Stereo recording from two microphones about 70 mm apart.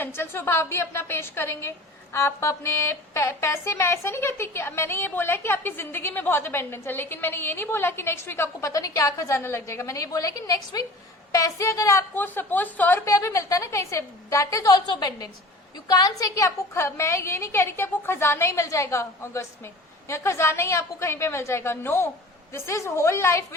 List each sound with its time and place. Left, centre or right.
0.0 s a woman's voice: left
8.7 s a woman's voice: left
12.1 s a woman's voice: left
13.1 s a woman's voice: left
14.7 s a woman's voice: left
15.9 s a woman's voice: left